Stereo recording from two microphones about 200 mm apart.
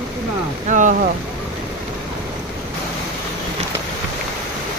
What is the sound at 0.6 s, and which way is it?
Speech, 40° right (ahead or behind).